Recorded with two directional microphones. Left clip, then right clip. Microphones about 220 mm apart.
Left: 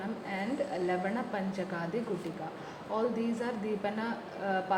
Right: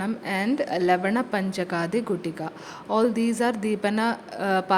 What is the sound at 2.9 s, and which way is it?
Speech, 50° right (ahead or behind).